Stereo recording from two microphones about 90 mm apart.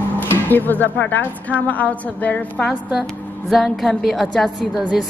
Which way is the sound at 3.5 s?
Centre (ahead or behind).